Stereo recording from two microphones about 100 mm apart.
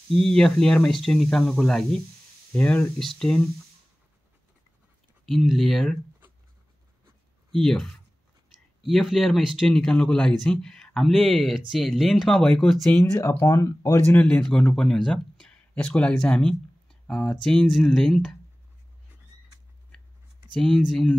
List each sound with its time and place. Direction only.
0.1 s speech: 5° left (ahead or behind)
2.5 s speech: 15° left (ahead or behind)
3.0 s speech: 5° left (ahead or behind)
5.2 s speech: centre (ahead or behind)
7.5 s speech: 5° left (ahead or behind)
13.1 s speech: 30° left (ahead or behind)
14.1 s speech: 10° left (ahead or behind)
20.5 s speech: 5° left (ahead or behind)